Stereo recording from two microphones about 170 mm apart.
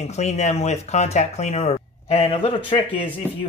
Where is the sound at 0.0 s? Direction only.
40° left (ahead or behind).